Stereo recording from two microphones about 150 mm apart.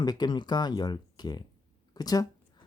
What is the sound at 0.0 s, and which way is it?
Speech, 30° left (ahead or behind).